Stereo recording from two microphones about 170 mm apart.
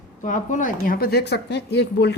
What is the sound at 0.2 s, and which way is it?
A woman's voice, 50° left (ahead or behind).